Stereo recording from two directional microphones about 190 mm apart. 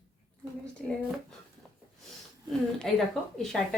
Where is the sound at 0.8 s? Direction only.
Centre (ahead or behind).